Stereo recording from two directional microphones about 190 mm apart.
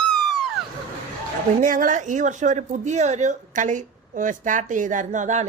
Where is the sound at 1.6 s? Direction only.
45° right (ahead or behind).